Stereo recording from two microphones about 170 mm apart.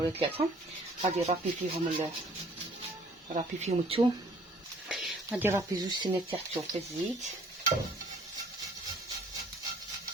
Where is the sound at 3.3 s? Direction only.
40° right (ahead or behind).